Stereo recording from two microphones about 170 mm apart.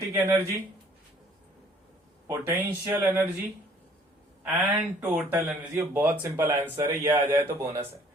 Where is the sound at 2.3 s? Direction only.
15° right (ahead or behind).